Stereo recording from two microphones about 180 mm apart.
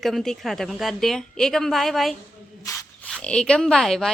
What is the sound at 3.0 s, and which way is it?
A woman's voice, 5° left (ahead or behind).